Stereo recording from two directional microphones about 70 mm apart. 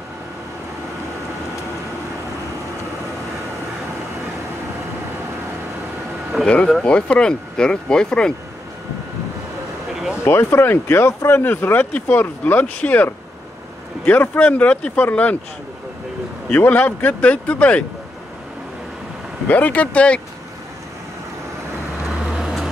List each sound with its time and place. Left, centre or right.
6.4 s speech: centre
10.2 s speech: left
16.5 s speech: left
19.5 s speech: left
22.3 s vehicle: centre